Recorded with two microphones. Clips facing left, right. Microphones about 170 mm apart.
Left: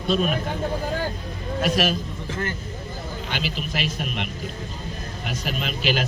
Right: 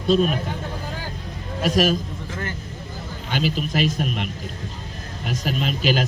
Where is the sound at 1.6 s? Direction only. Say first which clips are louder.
Right 3 dB; 40° right (ahead or behind).